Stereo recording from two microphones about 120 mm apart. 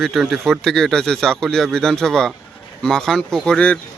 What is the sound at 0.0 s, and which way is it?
Speech, centre (ahead or behind).